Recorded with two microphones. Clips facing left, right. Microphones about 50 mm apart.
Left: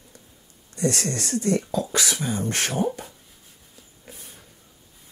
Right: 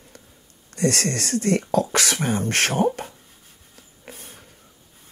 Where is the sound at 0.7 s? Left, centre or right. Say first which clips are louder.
Right 3 dB; right.